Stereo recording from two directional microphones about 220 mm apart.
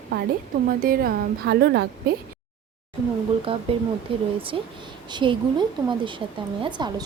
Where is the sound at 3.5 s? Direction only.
25° right (ahead or behind).